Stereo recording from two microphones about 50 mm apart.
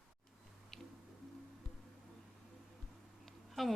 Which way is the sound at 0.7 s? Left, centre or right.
Centre.